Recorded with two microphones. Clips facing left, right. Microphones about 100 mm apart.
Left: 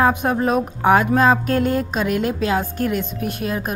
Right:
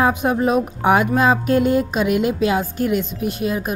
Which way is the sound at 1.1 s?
5° right (ahead or behind).